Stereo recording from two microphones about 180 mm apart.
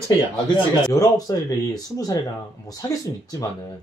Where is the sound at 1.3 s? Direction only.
20° left (ahead or behind).